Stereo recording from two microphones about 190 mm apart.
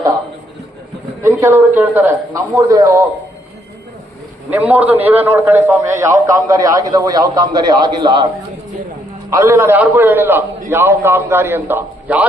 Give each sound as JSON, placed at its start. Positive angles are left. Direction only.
{"t": 1.2, "sound": "a man's voice", "side_deg": -10}
{"t": 4.5, "sound": "a man's voice", "side_deg": -10}
{"t": 9.3, "sound": "a man's voice", "side_deg": -15}